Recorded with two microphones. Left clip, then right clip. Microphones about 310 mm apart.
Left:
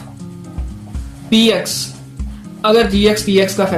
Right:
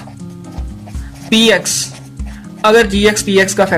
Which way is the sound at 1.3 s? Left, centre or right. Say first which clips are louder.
Right 3 dB; right.